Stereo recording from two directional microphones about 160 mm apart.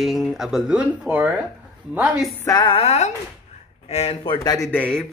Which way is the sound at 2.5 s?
25° left (ahead or behind).